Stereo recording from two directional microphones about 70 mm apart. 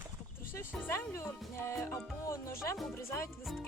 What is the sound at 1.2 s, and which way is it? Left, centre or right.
Speech, left.